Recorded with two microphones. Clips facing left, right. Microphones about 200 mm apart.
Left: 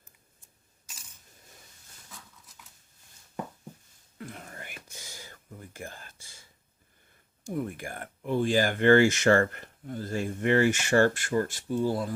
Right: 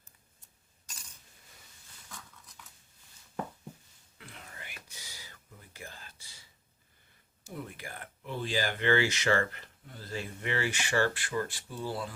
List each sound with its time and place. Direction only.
4.2 s whispering: 45° left (ahead or behind)
7.5 s speech: 50° left (ahead or behind)